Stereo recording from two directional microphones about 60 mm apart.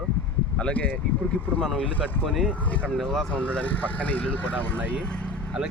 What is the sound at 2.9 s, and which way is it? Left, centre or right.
Speech, centre.